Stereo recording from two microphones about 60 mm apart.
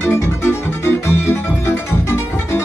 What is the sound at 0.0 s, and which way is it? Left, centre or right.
Music, left.